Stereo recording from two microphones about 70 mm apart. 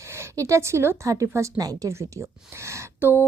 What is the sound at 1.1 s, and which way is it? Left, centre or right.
Speech, right.